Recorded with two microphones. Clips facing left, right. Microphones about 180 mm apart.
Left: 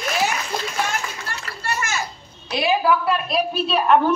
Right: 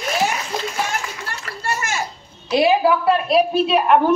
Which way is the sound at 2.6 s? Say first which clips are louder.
Right 4 dB; 30° right (ahead or behind).